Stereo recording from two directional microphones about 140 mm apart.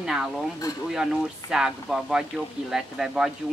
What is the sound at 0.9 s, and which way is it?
Speech, centre (ahead or behind).